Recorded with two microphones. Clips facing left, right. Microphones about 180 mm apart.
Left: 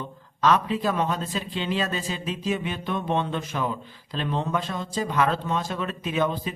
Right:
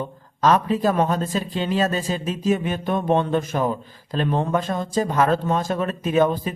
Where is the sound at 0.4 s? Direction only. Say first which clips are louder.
Right 4 dB; 45° right (ahead or behind).